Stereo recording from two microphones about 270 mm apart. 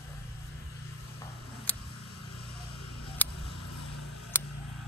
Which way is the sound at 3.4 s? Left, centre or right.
Left.